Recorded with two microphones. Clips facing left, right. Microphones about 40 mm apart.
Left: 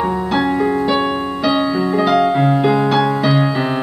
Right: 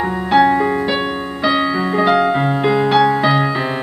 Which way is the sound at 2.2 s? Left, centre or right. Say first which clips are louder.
Left 1 dB; centre.